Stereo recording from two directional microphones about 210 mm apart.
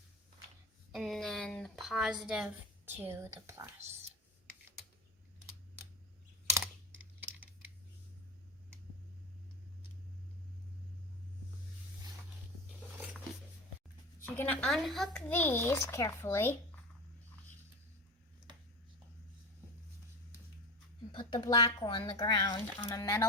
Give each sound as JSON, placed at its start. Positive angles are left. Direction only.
{"t": 0.9, "sound": "speech", "side_deg": 0}
{"t": 14.3, "sound": "a child's voice", "side_deg": 10}
{"t": 21.1, "sound": "a child's voice", "side_deg": 20}